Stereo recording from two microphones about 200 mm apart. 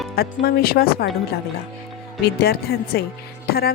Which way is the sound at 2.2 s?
50° left (ahead or behind).